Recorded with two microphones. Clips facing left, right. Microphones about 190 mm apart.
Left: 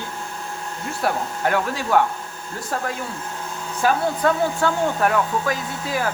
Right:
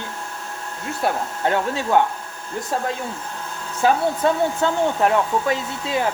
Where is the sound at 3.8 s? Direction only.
20° right (ahead or behind).